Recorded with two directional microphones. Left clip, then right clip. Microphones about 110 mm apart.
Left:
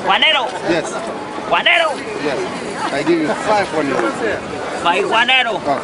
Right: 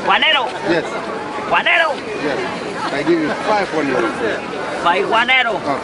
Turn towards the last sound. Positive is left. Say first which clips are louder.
# even
turn(degrees=15)  # may be behind; listen again after turning